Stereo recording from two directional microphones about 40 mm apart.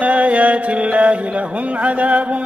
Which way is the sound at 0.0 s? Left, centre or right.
Right.